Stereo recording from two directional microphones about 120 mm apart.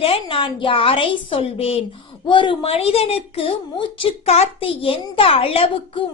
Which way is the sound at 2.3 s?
45° left (ahead or behind).